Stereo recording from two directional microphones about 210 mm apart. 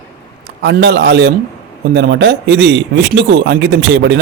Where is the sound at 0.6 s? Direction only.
55° right (ahead or behind).